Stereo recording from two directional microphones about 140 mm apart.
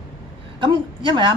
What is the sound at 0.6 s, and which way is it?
Speech, 35° right (ahead or behind).